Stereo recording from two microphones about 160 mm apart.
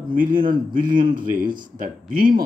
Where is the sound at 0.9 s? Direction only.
60° right (ahead or behind).